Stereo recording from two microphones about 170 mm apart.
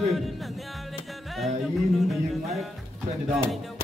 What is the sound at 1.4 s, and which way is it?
Music, centre (ahead or behind).